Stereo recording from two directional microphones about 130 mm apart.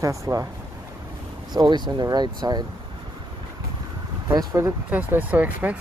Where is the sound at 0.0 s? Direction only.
25° right (ahead or behind).